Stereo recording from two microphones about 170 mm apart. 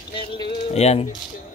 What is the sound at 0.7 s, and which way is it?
Speech, 40° left (ahead or behind).